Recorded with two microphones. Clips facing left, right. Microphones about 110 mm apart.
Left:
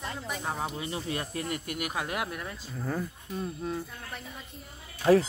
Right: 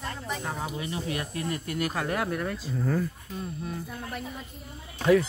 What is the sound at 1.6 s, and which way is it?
Speech, 15° left (ahead or behind).